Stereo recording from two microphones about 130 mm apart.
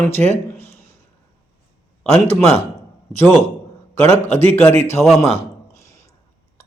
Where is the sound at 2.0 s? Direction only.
5° left (ahead or behind).